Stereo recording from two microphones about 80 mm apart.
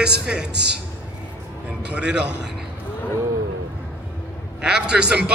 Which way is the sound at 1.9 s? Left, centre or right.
Centre.